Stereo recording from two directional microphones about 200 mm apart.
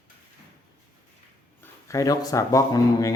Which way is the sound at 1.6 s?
15° left (ahead or behind).